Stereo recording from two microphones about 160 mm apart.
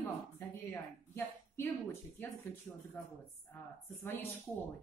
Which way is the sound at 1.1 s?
15° left (ahead or behind).